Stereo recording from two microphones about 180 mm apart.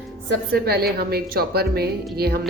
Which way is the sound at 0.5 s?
60° right (ahead or behind).